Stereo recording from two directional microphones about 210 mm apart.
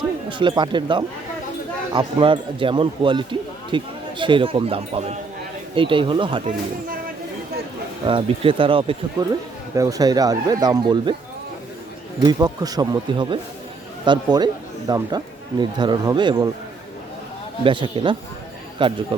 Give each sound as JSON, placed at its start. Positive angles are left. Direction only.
{"t": 0.3, "sound": "speech", "side_deg": -20}
{"t": 8.0, "sound": "speech", "side_deg": -25}
{"t": 12.2, "sound": "speech", "side_deg": -20}
{"t": 17.6, "sound": "speech", "side_deg": -25}